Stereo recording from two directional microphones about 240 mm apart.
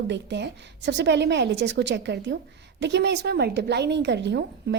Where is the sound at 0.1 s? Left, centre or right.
Right.